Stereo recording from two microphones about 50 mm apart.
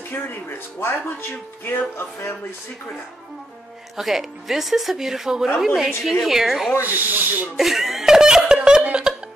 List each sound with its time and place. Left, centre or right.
0.1 s speech: left
3.9 s speech: centre
6.8 s speech: right
7.5 s speech: centre
8.5 s a sound: centre